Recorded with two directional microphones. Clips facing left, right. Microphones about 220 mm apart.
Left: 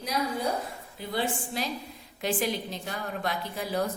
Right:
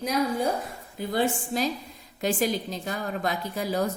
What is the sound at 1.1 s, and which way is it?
A woman's voice, 45° right (ahead or behind).